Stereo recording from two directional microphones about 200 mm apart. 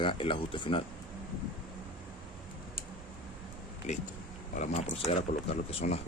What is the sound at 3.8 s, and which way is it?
Speech, 35° left (ahead or behind).